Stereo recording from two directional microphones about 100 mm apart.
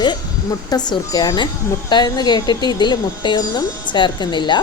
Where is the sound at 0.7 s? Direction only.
40° left (ahead or behind).